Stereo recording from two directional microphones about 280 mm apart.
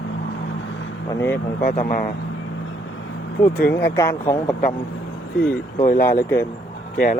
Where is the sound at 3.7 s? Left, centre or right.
Centre.